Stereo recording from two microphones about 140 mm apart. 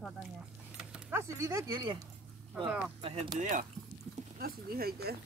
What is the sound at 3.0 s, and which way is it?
Speech, 40° right (ahead or behind).